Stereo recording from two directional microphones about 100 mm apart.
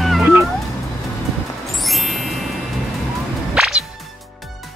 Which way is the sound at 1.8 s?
Centre (ahead or behind).